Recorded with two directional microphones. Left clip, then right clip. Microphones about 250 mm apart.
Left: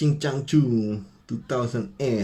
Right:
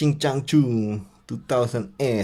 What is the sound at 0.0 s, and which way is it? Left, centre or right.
Speech, right.